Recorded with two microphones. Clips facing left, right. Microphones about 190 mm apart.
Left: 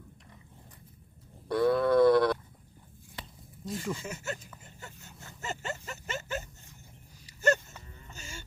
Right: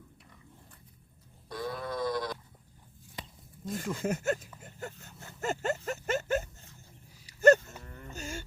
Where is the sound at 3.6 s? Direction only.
50° right (ahead or behind).